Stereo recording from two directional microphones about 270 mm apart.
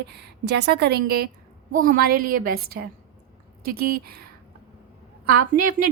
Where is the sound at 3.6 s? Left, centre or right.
Right.